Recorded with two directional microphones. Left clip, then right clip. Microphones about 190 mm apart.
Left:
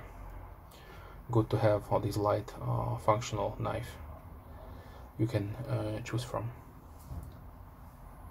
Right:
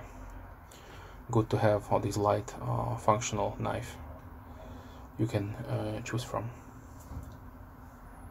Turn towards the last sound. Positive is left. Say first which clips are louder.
# right 2 dB
turn(degrees=-5)  # may be behind; listen again after turning